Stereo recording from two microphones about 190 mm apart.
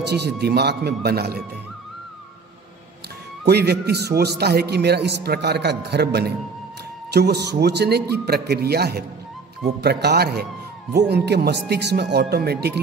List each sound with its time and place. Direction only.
0.0 s a man's voice: 60° right (ahead or behind)
3.4 s a man's voice: 60° right (ahead or behind)